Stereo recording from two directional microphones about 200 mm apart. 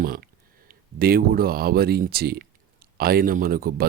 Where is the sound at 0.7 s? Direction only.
50° right (ahead or behind).